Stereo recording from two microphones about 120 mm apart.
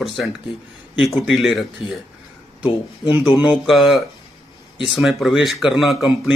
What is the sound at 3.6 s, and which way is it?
Speech, centre (ahead or behind).